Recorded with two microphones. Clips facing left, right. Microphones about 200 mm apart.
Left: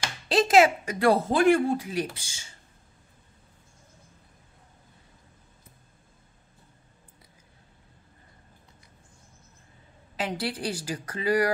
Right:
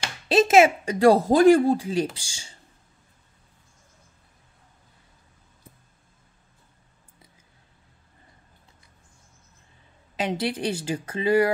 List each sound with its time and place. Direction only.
0.3 s speech: 25° right (ahead or behind)
10.1 s speech: 25° right (ahead or behind)